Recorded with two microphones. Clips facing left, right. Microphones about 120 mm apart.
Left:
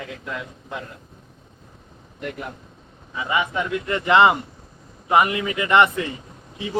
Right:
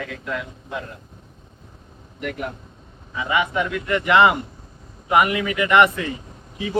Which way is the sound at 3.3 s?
30° left (ahead or behind).